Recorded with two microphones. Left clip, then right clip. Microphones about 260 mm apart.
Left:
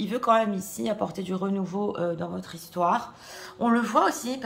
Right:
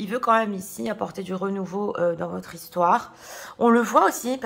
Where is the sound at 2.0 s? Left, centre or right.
Right.